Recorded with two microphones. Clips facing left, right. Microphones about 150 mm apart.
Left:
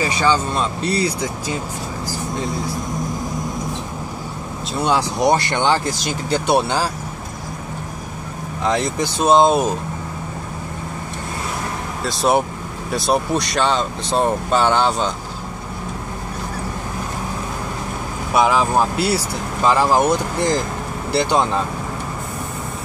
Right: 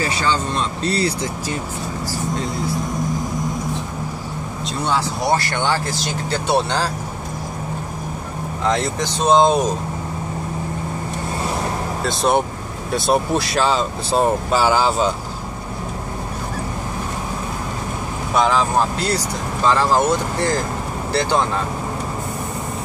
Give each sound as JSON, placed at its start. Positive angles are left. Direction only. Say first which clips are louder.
{"t": 0.8, "sound": "speech", "louder": "right 1 dB", "side_deg": 10}
{"t": 4.8, "sound": "speech", "louder": "left 4 dB", "side_deg": 15}
{"t": 8.6, "sound": "speech", "louder": "left 1 dB", "side_deg": 10}
{"t": 12.0, "sound": "speech", "louder": "left 1 dB", "side_deg": 0}
{"t": 18.3, "sound": "speech", "louder": "left 1 dB", "side_deg": 10}